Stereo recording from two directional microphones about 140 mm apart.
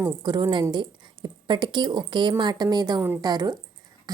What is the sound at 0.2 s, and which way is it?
A woman's voice, 30° right (ahead or behind).